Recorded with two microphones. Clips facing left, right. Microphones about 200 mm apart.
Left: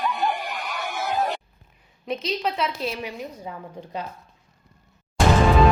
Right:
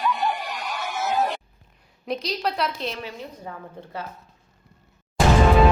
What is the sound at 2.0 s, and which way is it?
Speech, centre (ahead or behind).